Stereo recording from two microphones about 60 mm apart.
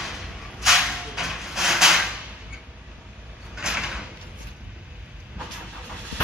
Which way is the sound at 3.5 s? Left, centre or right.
Centre.